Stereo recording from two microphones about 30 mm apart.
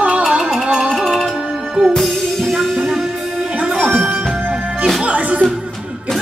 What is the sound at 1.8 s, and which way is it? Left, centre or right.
Music, centre.